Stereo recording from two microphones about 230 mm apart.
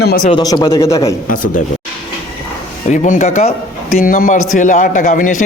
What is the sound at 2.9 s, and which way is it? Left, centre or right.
A man's voice, left.